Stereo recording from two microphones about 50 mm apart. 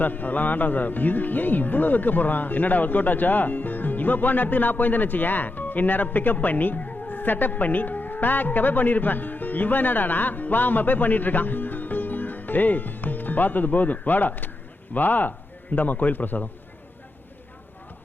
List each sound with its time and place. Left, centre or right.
0.0 s a man's voice: left